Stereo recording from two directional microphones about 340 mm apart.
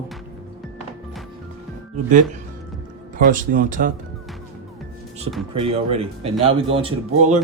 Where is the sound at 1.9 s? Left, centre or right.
Right.